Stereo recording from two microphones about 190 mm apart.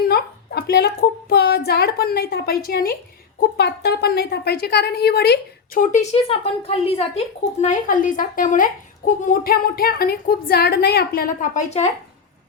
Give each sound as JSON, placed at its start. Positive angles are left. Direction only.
{"t": 0.0, "sound": "a sound", "side_deg": 55}
{"t": 3.6, "sound": "speech", "side_deg": 60}
{"t": 5.8, "sound": "speech", "side_deg": 40}
{"t": 7.6, "sound": "a woman's voice", "side_deg": 40}